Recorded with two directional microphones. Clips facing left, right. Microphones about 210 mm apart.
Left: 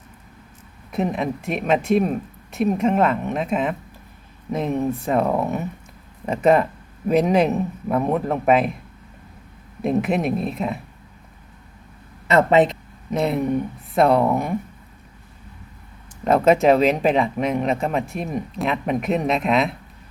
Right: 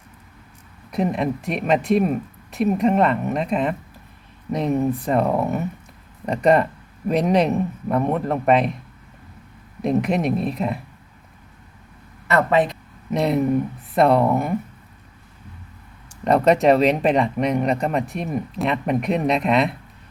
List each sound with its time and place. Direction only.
0.9 s speech: centre (ahead or behind)
9.8 s speech: 5° left (ahead or behind)
12.3 s speech: 20° left (ahead or behind)
13.1 s speech: centre (ahead or behind)
16.2 s speech: centre (ahead or behind)